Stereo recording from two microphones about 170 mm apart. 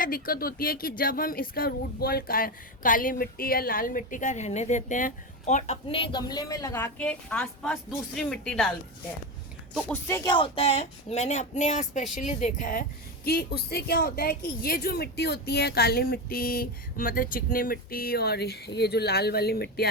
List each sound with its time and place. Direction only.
0.0 s a woman's voice: 60° left (ahead or behind); by 8.7 s 5° left (ahead or behind)
10.2 s speech: 30° left (ahead or behind); by 12.8 s 50° left (ahead or behind)
13.2 s speech: 65° left (ahead or behind)